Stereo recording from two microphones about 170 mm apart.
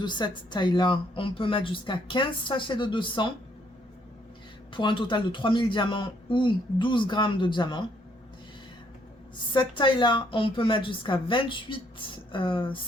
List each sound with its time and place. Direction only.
0.0 s speech: 25° left (ahead or behind)
4.7 s speech: 30° left (ahead or behind)
9.5 s speech: 25° left (ahead or behind)